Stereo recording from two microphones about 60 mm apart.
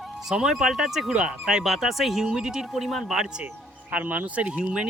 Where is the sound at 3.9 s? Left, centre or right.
Right.